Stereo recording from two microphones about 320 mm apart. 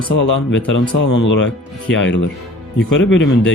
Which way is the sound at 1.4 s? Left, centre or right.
Left.